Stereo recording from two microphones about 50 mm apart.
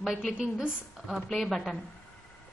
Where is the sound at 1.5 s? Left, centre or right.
Centre.